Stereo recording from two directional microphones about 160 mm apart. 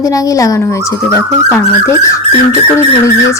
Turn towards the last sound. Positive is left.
turn(degrees=20)  # may be behind; listen again after turning